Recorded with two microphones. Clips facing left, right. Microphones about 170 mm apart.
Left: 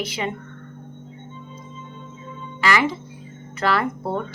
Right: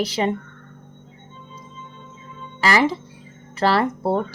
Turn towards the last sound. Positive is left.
turn(degrees=-35)  # may be behind; listen again after turning